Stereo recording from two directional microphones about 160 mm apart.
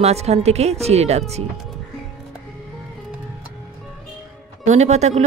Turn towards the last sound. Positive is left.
turn(degrees=-45)  # may be behind; listen again after turning